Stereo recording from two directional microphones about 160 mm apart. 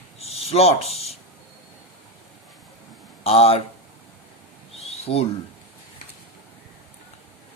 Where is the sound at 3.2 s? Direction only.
40° left (ahead or behind).